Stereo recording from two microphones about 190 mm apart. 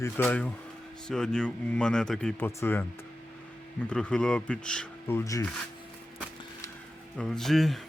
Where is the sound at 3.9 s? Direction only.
5° left (ahead or behind).